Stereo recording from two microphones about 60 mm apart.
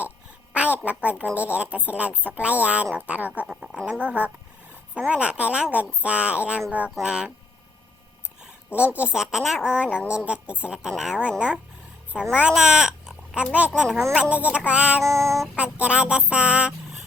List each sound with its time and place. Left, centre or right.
0.5 s a sound: right
1.2 s speech: right
3.4 s a woman's voice: centre
8.7 s speech: right
9.1 s a woman's voice: centre
9.6 s a woman's voice: centre
14.2 s speech: right
15.0 s child singing: right
15.5 s speech: right